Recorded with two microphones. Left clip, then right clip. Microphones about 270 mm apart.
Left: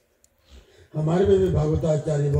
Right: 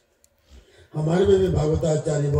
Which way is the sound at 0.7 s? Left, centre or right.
Centre.